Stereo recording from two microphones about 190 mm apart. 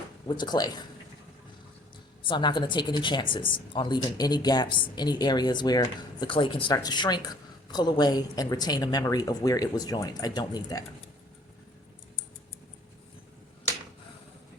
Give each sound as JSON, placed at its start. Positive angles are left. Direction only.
{"t": 0.3, "sound": "a woman's voice", "side_deg": 25}
{"t": 2.2, "sound": "a woman's voice", "side_deg": 25}